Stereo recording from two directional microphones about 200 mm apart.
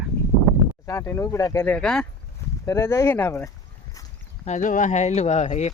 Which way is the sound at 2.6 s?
15° left (ahead or behind).